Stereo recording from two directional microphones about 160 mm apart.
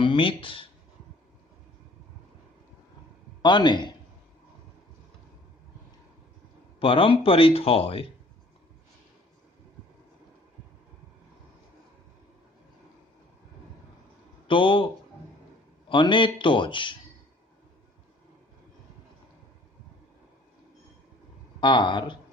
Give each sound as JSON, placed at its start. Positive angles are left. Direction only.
{"t": 0.0, "sound": "speech", "side_deg": 30}
{"t": 3.4, "sound": "speech", "side_deg": 30}
{"t": 6.7, "sound": "speech", "side_deg": 35}
{"t": 14.4, "sound": "a man's voice", "side_deg": 30}
{"t": 15.9, "sound": "speech", "side_deg": 30}
{"t": 21.6, "sound": "speech", "side_deg": 30}